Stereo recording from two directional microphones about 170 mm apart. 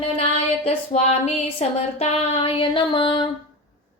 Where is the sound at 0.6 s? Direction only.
40° left (ahead or behind).